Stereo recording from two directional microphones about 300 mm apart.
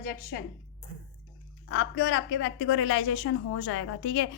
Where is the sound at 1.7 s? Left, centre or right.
Left.